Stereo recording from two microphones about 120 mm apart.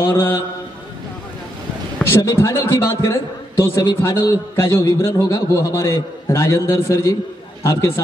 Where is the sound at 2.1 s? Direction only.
20° left (ahead or behind).